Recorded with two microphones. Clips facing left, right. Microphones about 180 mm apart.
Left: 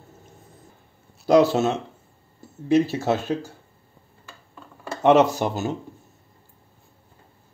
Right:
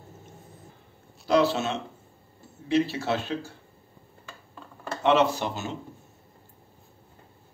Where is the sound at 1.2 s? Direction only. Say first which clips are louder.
Left 6 dB; 45° left (ahead or behind).